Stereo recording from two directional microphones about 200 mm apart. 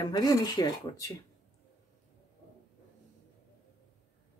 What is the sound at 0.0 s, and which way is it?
Speech, 20° left (ahead or behind).